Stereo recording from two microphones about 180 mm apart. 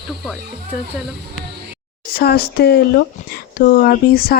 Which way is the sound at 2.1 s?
60° left (ahead or behind).